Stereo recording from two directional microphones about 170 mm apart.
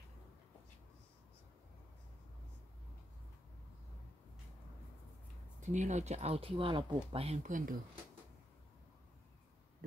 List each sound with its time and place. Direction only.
5.6 s speech: 45° right (ahead or behind)